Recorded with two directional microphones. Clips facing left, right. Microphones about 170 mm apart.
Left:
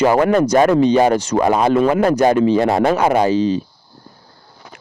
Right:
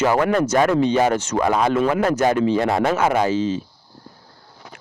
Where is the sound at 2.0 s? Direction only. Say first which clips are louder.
Left 4 dB; 35° left (ahead or behind).